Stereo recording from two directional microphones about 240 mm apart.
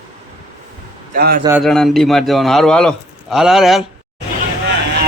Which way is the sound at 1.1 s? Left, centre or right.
Right.